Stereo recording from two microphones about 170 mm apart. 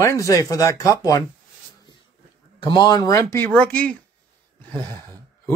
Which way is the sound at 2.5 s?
25° left (ahead or behind).